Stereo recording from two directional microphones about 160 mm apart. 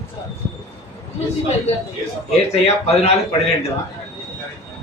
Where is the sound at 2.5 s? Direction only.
40° left (ahead or behind).